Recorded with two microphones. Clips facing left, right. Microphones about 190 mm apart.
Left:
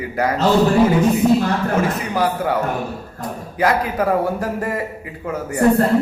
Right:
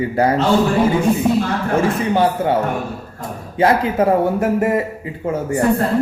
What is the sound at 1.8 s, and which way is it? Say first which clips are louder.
A man's voice: right 4 dB; 25° right (ahead or behind).